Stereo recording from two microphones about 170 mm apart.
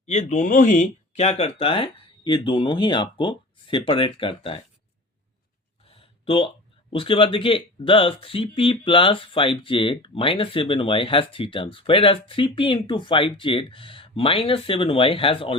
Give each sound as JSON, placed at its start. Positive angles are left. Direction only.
{"t": 0.0, "sound": "speech", "side_deg": 40}
{"t": 5.8, "sound": "a sound", "side_deg": 35}
{"t": 6.9, "sound": "speech", "side_deg": 30}